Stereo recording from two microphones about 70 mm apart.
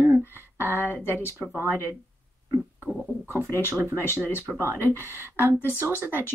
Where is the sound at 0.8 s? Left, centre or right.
Right.